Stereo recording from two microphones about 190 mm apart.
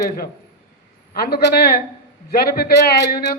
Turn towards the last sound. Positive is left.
turn(degrees=55)  # may be behind; listen again after turning